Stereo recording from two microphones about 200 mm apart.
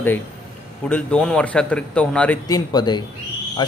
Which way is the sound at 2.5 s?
20° left (ahead or behind).